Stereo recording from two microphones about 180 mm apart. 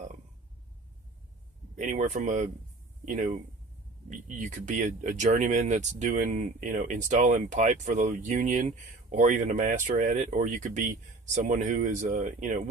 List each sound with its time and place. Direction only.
1.7 s speech: 45° right (ahead or behind)